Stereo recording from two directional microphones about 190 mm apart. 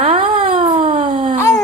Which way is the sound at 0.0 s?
30° right (ahead or behind).